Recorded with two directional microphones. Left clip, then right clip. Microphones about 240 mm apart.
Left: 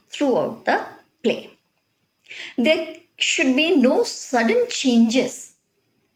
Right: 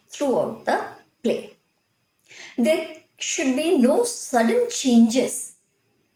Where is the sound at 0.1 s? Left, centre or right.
Left.